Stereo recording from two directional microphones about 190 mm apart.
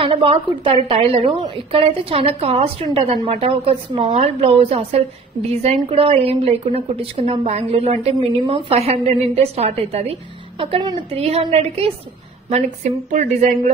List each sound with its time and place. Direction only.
0.0 s a woman's voice: 30° right (ahead or behind)